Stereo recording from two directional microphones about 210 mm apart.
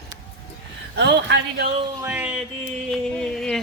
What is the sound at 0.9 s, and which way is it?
Speech, 55° right (ahead or behind).